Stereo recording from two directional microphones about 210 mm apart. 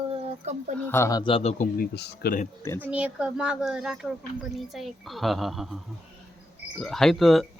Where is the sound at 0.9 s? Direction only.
10° left (ahead or behind); by 1.6 s 30° left (ahead or behind).